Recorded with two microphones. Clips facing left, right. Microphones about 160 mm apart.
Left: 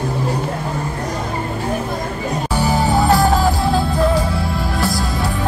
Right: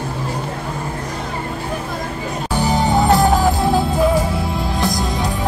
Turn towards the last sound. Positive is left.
turn(degrees=-20)  # may be behind; listen again after turning